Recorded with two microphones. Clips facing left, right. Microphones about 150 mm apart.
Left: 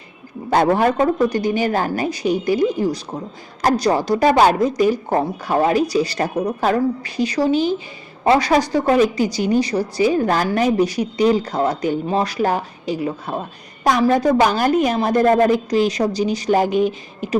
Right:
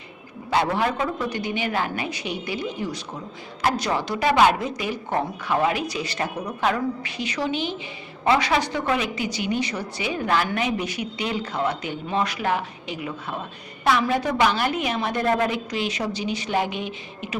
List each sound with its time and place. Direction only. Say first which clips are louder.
0.5 s a woman's voice: left 7 dB; 45° left (ahead or behind)